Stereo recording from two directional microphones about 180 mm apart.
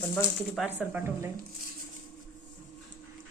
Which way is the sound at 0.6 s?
10° right (ahead or behind).